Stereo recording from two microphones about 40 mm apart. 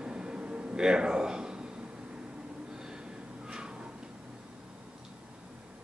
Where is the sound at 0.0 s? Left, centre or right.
Right.